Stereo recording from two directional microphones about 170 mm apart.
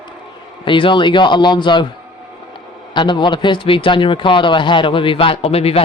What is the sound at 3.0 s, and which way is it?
Speech, 25° left (ahead or behind).